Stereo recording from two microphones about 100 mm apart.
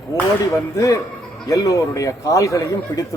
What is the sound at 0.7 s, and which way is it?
A man's voice, 35° left (ahead or behind).